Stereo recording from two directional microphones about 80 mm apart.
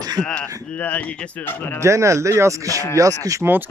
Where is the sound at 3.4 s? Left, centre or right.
Centre.